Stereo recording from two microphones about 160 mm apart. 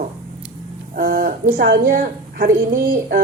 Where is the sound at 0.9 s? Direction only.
65° right (ahead or behind).